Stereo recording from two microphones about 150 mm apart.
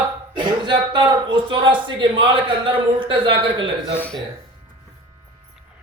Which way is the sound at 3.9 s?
10° left (ahead or behind).